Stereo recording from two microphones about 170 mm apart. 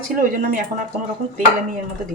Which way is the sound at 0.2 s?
50° right (ahead or behind).